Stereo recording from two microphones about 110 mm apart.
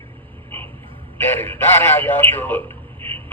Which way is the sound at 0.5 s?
20° left (ahead or behind).